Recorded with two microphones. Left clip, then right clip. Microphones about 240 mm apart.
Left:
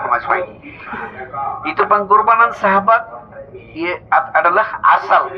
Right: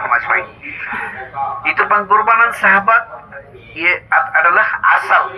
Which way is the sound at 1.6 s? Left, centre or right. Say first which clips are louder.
Right 1 dB; right.